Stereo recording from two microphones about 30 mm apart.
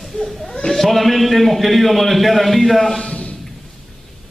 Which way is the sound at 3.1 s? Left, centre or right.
Left.